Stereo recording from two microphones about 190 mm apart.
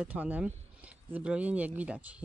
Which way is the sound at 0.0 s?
10° right (ahead or behind).